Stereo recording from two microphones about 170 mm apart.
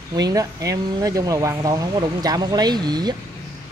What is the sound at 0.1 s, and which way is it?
Speech, 20° right (ahead or behind).